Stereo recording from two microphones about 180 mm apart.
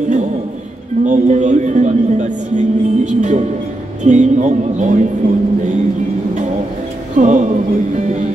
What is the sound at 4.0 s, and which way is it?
A capella, 40° right (ahead or behind).